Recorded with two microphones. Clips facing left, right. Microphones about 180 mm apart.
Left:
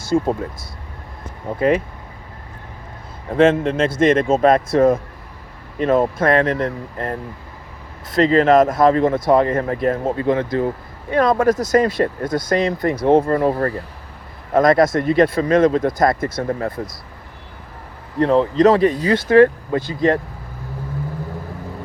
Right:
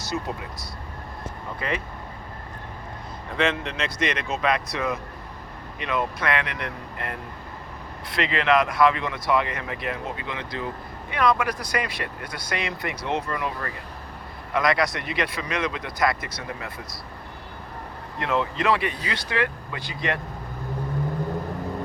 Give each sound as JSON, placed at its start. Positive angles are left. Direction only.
{"t": 0.0, "sound": "speech", "side_deg": 50}
{"t": 1.5, "sound": "speech", "side_deg": 50}
{"t": 3.2, "sound": "speech", "side_deg": 50}
{"t": 18.2, "sound": "speech", "side_deg": 35}